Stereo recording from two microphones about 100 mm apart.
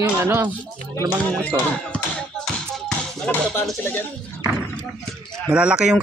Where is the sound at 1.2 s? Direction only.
15° left (ahead or behind).